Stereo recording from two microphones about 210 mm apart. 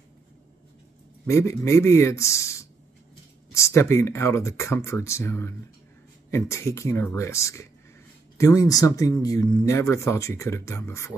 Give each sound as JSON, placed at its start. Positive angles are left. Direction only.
{"t": 1.2, "sound": "speech", "side_deg": 15}